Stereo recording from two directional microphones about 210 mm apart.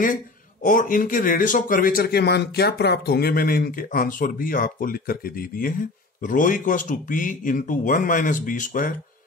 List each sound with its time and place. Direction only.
0.0 s speech: 40° left (ahead or behind)